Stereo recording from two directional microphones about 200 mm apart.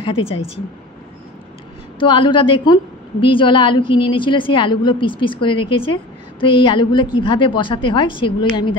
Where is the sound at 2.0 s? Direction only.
25° left (ahead or behind).